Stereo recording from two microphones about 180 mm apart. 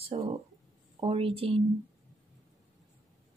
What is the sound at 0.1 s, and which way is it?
Speech, 35° right (ahead or behind).